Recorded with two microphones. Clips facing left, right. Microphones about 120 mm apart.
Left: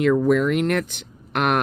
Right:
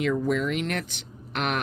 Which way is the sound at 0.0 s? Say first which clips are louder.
Left 7 dB; 55° left (ahead or behind).